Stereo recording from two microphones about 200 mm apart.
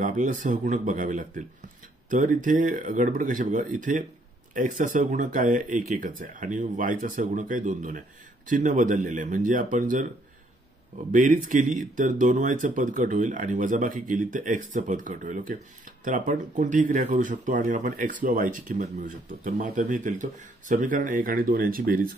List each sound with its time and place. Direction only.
0.0 s speech: 40° right (ahead or behind)
11.1 s speech: 40° right (ahead or behind)